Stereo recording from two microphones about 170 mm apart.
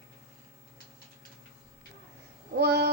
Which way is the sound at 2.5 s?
75° right (ahead or behind).